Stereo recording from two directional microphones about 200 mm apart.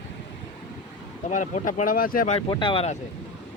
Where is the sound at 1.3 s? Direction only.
40° left (ahead or behind).